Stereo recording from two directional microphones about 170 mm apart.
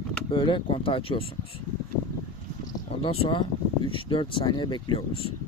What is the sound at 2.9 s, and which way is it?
Speech, 35° left (ahead or behind).